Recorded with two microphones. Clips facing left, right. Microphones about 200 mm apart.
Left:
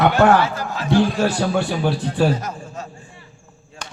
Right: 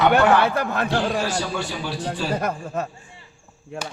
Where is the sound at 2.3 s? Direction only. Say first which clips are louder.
Right 5 dB; 60° right (ahead or behind).